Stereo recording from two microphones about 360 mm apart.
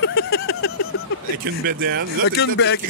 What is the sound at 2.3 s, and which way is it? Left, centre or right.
Speech, left.